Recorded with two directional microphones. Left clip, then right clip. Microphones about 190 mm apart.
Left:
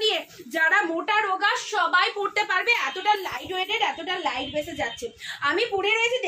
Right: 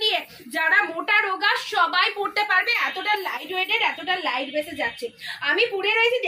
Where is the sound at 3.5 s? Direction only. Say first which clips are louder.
Right 3 dB; 30° left (ahead or behind).